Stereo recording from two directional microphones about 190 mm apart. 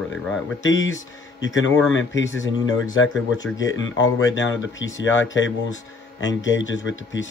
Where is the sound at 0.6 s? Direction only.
85° left.